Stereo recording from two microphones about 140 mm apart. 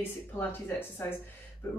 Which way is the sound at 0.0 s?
15° left (ahead or behind).